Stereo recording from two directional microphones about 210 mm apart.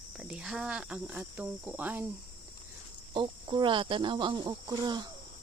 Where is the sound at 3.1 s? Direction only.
20° right (ahead or behind).